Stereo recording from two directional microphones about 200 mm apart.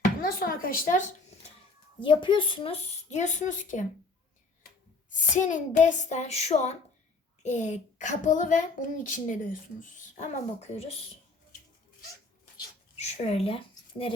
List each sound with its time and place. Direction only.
0.0 s speech: 50° left (ahead or behind)
2.0 s a child's voice: 25° left (ahead or behind); by 3.8 s 40° left (ahead or behind)
5.1 s a child's voice: 40° left (ahead or behind)
10.8 s a child's voice: 30° left (ahead or behind)
13.0 s a woman's voice: 30° left (ahead or behind)